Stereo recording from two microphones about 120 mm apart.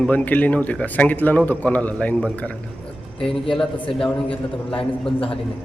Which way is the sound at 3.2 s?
45° left (ahead or behind).